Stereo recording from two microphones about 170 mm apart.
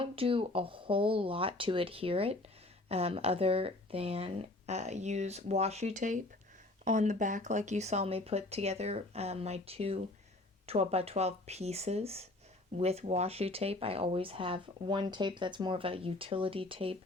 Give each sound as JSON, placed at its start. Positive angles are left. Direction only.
{"t": 0.0, "sound": "speech", "side_deg": -30}